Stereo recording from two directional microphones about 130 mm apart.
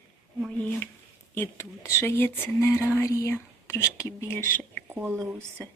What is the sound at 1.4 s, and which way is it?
Speech, 20° left (ahead or behind).